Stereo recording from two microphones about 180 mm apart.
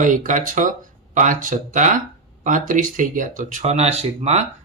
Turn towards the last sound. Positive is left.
turn(degrees=-35)  # may be behind; listen again after turning